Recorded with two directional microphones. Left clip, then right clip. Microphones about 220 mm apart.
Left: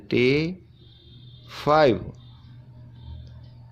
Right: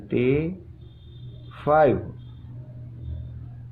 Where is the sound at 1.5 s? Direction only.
50° left (ahead or behind).